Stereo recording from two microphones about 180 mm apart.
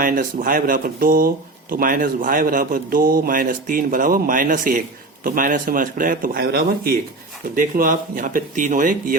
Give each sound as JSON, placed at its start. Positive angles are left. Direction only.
{"t": 0.0, "sound": "speech", "side_deg": -50}